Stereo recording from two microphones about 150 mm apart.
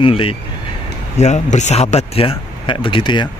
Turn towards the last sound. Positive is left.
turn(degrees=35)  # may be behind; listen again after turning